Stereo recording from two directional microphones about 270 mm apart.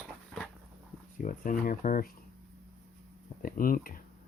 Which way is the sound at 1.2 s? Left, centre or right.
Left.